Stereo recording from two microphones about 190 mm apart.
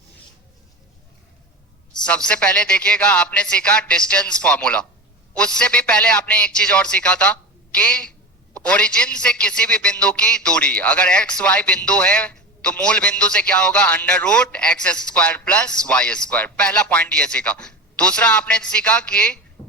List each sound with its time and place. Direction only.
2.0 s a man's voice: 5° left (ahead or behind)